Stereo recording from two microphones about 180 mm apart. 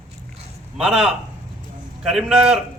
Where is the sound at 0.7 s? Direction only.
5° right (ahead or behind).